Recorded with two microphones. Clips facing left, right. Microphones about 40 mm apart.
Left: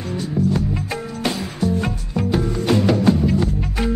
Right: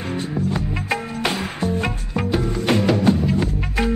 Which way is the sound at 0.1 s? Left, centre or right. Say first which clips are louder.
Left 4 dB; right.